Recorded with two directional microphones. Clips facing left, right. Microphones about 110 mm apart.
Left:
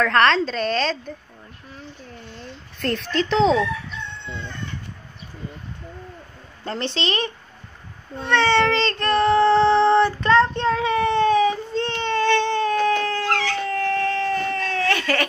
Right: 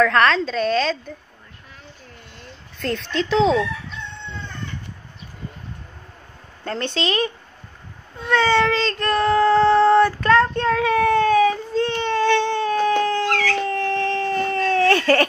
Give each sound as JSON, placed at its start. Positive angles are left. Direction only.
{"t": 0.0, "sound": "a woman's voice", "side_deg": 0}
{"t": 2.8, "sound": "a woman's voice", "side_deg": 0}
{"t": 6.6, "sound": "a woman's voice", "side_deg": 5}
{"t": 8.3, "sound": "child singing", "side_deg": -5}
{"t": 13.3, "sound": "dog", "side_deg": 25}
{"t": 13.7, "sound": "baby cry", "side_deg": -30}